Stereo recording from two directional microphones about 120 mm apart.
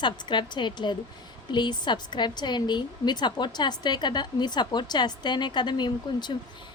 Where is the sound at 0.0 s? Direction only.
40° left (ahead or behind).